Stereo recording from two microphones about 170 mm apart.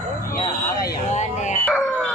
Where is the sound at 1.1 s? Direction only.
45° left (ahead or behind).